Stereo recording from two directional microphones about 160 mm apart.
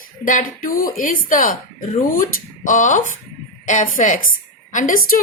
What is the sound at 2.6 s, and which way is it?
A woman's voice, 55° left (ahead or behind).